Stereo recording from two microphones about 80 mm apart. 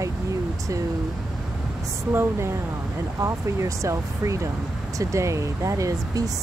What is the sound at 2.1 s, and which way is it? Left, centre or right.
Speech, right.